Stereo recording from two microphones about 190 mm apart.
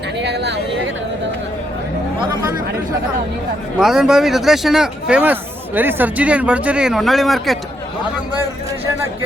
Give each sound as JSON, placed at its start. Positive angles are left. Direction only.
{"t": 0.2, "sound": "speech", "side_deg": -65}
{"t": 3.8, "sound": "speech", "side_deg": -5}